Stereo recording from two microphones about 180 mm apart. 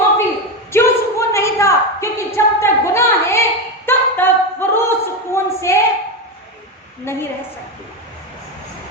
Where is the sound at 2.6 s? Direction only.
15° left (ahead or behind).